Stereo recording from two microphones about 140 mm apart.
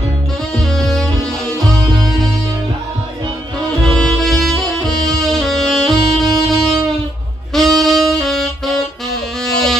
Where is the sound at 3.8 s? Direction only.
Centre (ahead or behind).